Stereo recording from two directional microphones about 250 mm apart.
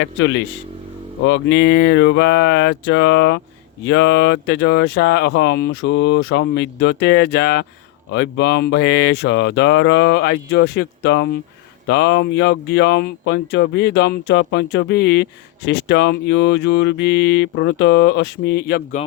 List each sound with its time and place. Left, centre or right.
0.0 s speech: left